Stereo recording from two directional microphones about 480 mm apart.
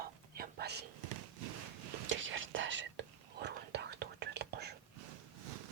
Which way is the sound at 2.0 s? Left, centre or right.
Right.